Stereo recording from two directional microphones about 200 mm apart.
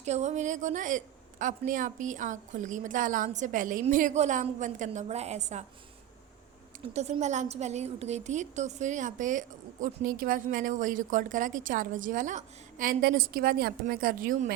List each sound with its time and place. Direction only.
0.0 s a woman's voice: 35° right (ahead or behind)
6.9 s a woman's voice: 35° right (ahead or behind)